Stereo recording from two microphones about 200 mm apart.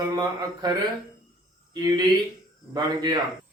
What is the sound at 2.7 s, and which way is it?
Speech, 20° right (ahead or behind).